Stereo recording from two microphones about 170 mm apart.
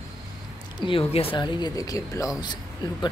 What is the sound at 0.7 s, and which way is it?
Speech, 30° left (ahead or behind).